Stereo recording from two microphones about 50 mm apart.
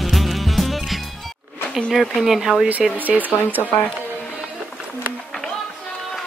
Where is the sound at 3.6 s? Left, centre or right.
Left.